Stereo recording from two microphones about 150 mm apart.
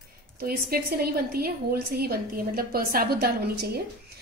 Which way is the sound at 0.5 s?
85° right.